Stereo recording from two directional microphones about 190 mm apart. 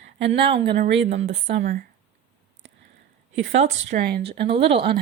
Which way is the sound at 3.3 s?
70° right (ahead or behind).